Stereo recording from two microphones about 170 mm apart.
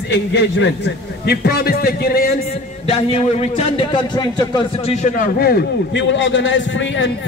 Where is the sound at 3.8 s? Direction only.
25° left (ahead or behind).